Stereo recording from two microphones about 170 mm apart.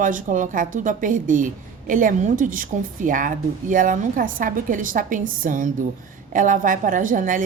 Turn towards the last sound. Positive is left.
turn(degrees=-50)  # may be behind; listen again after turning